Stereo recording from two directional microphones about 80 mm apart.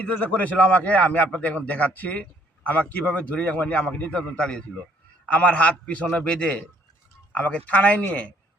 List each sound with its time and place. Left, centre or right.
0.0 s a man's voice: centre